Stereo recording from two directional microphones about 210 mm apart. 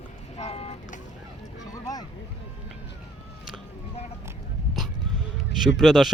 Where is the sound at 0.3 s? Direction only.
30° left (ahead or behind).